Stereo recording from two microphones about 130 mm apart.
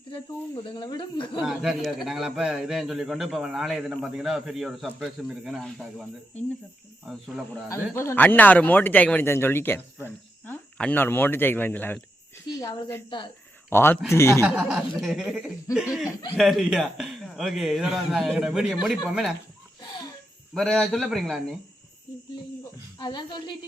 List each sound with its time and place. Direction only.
0.1 s speech: 40° left (ahead or behind)
1.4 s speech: 5° right (ahead or behind)
7.9 s speech: 15° left (ahead or behind)
13.1 s speech: 40° left (ahead or behind)
13.7 s speech: 15° left (ahead or behind)
14.4 s speech: 10° right (ahead or behind)
15.7 s laughter: 5° right (ahead or behind)
16.4 s speech: centre (ahead or behind)
20.5 s speech: centre (ahead or behind)
23.0 s speech: 35° left (ahead or behind)